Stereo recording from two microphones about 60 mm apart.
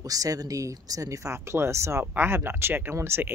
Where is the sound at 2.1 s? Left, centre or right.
Right.